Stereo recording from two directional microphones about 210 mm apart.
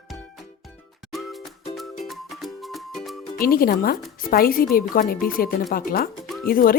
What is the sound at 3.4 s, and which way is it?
A woman's voice, 45° left (ahead or behind).